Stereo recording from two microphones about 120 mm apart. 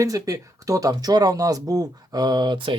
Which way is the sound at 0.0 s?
30° right (ahead or behind).